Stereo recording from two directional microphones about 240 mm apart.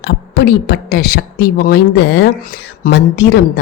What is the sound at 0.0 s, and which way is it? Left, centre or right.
A woman's voice, left.